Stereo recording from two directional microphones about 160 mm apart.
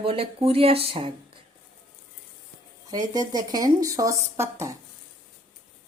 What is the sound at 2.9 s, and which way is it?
Speech, 25° right (ahead or behind).